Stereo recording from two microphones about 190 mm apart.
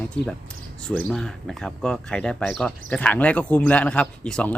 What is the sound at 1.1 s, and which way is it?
Speech, centre (ahead or behind).